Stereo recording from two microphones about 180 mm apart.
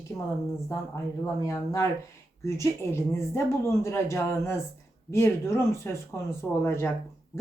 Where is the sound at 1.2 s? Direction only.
15° left (ahead or behind).